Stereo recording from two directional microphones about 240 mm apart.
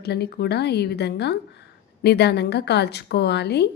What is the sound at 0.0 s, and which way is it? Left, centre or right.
Speech, left.